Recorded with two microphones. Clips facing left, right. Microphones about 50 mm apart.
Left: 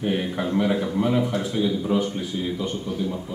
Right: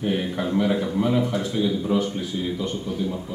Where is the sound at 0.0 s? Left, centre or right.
Centre.